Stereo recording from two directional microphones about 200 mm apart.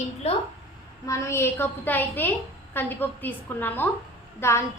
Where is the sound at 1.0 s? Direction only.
15° left (ahead or behind).